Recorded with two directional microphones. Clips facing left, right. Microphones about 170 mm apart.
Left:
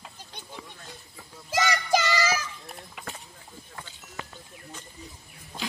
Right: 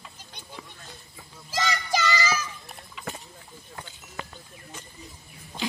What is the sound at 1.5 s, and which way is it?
Child singing, 50° left (ahead or behind).